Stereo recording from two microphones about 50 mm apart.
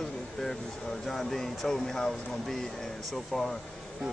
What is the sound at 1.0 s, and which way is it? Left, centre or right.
Speech, centre.